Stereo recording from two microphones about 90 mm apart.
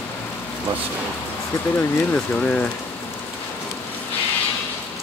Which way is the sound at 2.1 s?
15° left (ahead or behind).